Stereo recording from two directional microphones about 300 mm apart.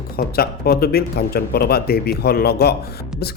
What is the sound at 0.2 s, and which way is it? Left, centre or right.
A man's voice, left.